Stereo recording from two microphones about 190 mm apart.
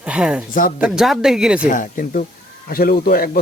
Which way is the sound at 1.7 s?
45° left (ahead or behind).